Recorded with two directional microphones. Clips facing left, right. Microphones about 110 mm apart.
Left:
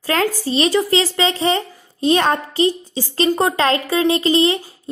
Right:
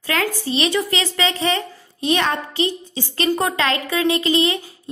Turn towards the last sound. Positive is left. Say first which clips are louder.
# left 3 dB
turn(degrees=35)  # may be behind; listen again after turning